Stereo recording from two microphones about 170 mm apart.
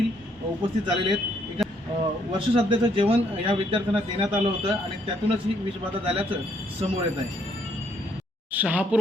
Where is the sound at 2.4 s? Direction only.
30° right (ahead or behind).